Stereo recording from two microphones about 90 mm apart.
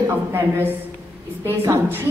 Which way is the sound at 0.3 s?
20° right (ahead or behind).